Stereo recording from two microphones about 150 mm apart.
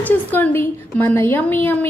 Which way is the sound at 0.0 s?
10° left (ahead or behind).